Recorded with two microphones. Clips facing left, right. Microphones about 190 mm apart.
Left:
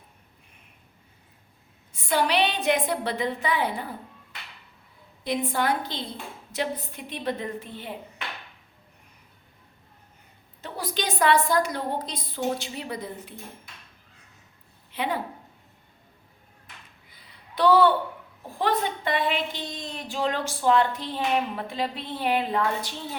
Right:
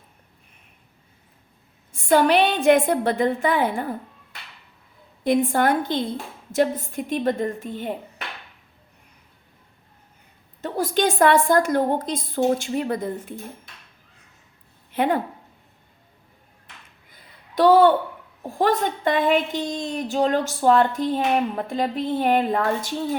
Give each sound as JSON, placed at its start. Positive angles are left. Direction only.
{"t": 1.9, "sound": "a woman's voice", "side_deg": -50}
{"t": 10.6, "sound": "a woman's voice", "side_deg": -50}
{"t": 14.9, "sound": "speech", "side_deg": -50}
{"t": 17.2, "sound": "a sound", "side_deg": -45}
{"t": 18.4, "sound": "a woman's voice", "side_deg": -45}